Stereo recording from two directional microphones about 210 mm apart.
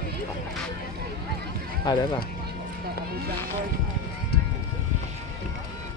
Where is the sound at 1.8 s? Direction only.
20° left (ahead or behind).